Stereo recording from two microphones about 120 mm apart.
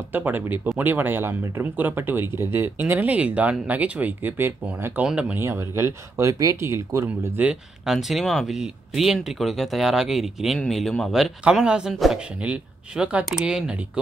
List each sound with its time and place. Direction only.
0.1 s speech: 15° right (ahead or behind)
5.4 s speech: 20° right (ahead or behind)
7.4 s speech: centre (ahead or behind)